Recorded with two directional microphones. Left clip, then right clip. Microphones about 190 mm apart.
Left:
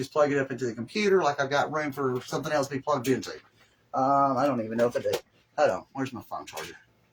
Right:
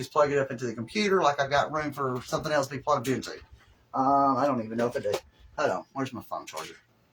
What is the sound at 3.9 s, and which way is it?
Speech, 10° left (ahead or behind).